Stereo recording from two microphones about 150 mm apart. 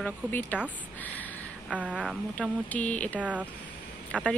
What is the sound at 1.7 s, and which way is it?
Speech, 10° right (ahead or behind).